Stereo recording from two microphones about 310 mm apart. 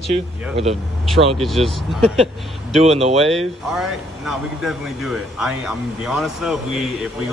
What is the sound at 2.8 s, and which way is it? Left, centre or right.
Speech, centre.